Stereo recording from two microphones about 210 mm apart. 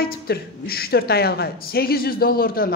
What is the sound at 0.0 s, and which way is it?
A woman's voice, 45° left (ahead or behind).